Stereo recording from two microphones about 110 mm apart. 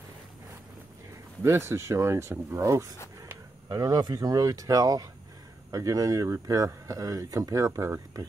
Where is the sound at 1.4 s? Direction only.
25° right (ahead or behind).